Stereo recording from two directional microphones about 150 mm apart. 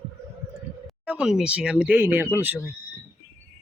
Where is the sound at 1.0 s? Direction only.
5° right (ahead or behind).